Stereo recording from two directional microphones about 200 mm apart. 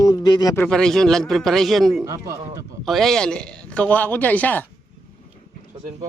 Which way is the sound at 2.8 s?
Centre (ahead or behind).